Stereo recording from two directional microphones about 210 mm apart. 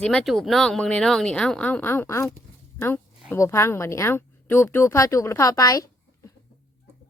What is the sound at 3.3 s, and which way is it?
Speech, 15° left (ahead or behind).